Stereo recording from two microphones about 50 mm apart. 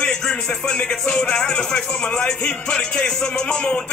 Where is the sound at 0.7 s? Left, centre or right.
Centre.